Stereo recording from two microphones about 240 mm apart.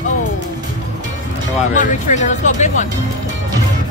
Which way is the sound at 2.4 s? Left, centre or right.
Left.